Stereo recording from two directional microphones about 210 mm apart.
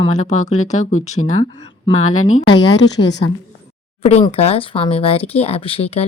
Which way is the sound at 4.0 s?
30° left (ahead or behind).